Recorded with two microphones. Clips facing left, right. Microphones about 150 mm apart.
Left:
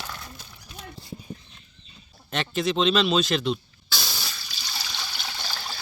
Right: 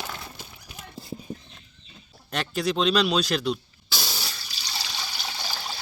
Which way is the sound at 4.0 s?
5° right (ahead or behind).